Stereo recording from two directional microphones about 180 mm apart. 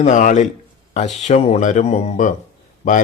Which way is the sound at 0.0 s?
45° left (ahead or behind).